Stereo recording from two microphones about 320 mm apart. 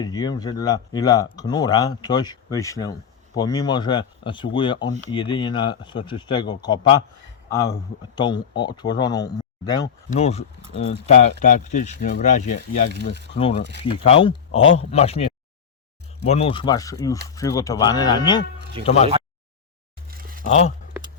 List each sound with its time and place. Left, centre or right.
0.0 s speech: centre
12.9 s speech: right
13.3 s speech: centre
18.8 s speech: centre
20.1 s a sound: right
20.5 s speech: centre